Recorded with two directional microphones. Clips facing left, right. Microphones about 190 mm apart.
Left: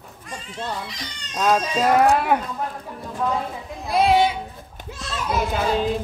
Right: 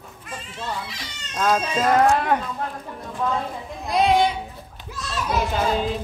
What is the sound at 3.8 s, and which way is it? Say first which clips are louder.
Speech: left 1 dB; centre (ahead or behind).